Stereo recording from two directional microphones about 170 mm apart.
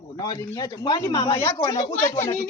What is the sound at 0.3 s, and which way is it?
A man's voice, 20° left (ahead or behind).